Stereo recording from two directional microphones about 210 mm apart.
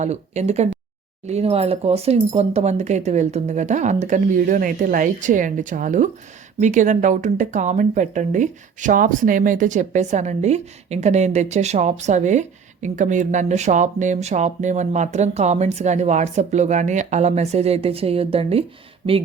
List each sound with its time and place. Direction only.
0.0 s speech: 30° right (ahead or behind)